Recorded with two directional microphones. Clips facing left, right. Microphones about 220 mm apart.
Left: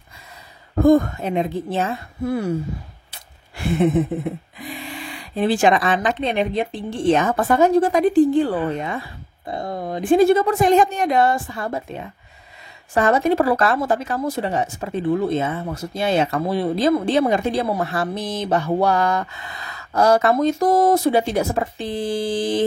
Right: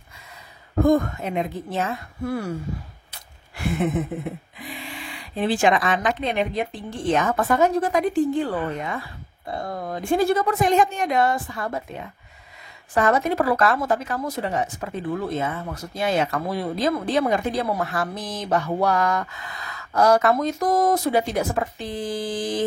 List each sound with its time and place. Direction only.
0.8 s speech: 30° left (ahead or behind)
5.4 s speech: 40° left (ahead or behind)